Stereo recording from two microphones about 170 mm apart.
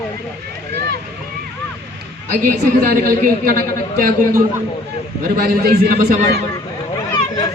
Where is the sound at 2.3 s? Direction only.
60° right (ahead or behind).